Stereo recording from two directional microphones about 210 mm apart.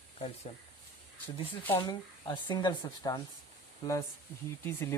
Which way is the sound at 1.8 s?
20° left (ahead or behind).